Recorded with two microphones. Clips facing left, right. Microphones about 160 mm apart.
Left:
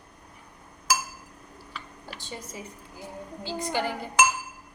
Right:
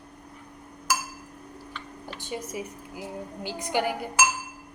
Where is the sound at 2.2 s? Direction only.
15° right (ahead or behind).